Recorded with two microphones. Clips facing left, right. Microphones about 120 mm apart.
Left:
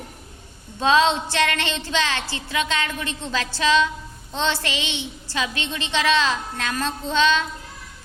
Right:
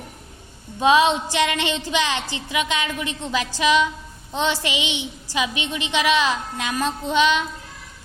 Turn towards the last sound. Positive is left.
turn(degrees=-15)  # may be behind; listen again after turning